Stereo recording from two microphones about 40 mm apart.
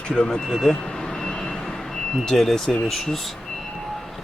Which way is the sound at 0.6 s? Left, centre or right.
Centre.